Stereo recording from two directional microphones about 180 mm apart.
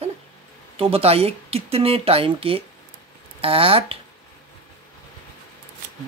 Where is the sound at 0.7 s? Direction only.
30° right (ahead or behind).